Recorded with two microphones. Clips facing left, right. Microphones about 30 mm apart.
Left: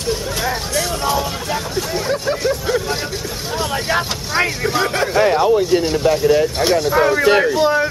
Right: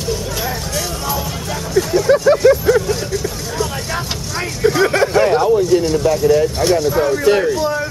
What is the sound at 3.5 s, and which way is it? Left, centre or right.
Vehicle, left.